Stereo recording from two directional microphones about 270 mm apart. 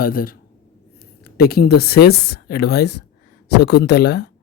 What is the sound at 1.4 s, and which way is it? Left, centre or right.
A woman's voice, left.